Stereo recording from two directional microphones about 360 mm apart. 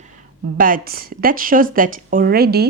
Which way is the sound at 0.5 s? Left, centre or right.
Right.